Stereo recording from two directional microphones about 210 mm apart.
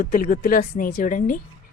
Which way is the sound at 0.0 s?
40° left (ahead or behind).